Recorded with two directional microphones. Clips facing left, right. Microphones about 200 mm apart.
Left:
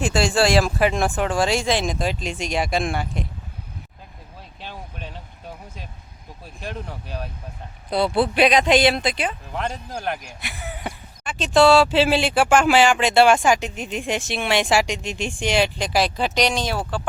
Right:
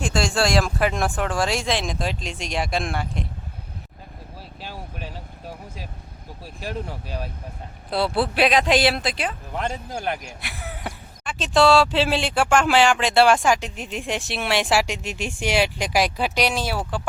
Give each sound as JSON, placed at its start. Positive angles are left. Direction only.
{"t": 0.0, "sound": "speech", "side_deg": 5}
{"t": 4.6, "sound": "vehicle", "side_deg": -5}
{"t": 6.6, "sound": "speech", "side_deg": -5}